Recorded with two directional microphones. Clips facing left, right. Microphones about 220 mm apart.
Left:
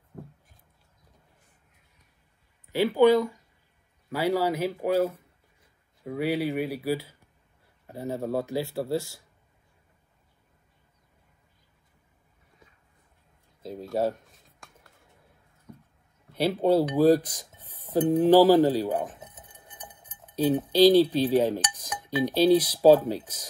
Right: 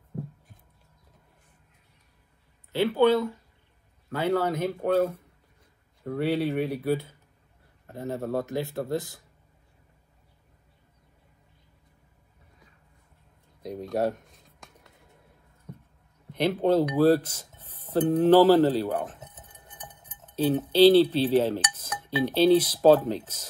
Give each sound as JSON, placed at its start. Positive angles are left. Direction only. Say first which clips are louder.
{"t": 2.7, "sound": "speech", "louder": "left 2 dB", "side_deg": 15}
{"t": 6.0, "sound": "speech", "louder": "right 1 dB", "side_deg": 5}
{"t": 8.6, "sound": "speech", "louder": "left 1 dB", "side_deg": -20}
{"t": 13.6, "sound": "a sound", "louder": "even", "side_deg": 5}
{"t": 16.3, "sound": "speech", "louder": "even", "side_deg": 10}